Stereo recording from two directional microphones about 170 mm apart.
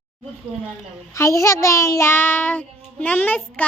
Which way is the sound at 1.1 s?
15° left (ahead or behind).